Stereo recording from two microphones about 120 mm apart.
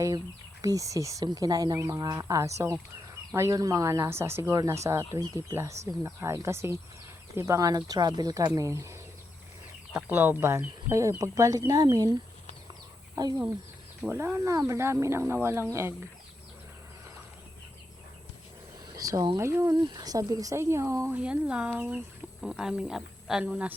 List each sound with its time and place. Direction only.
0.6 s speech: 30° right (ahead or behind)
13.2 s speech: 35° right (ahead or behind)
14.0 s speech: 20° right (ahead or behind)
18.9 s speech: 30° right (ahead or behind)
19.4 s speech: 25° right (ahead or behind)
19.7 s speech: 35° right (ahead or behind)
21.2 s speech: 10° right (ahead or behind)
22.4 s a woman's voice: 5° right (ahead or behind)